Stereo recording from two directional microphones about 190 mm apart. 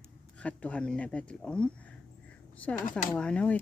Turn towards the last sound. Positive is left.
turn(degrees=5)  # may be behind; listen again after turning